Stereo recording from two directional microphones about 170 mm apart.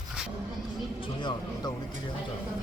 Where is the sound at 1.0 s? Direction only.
25° left (ahead or behind).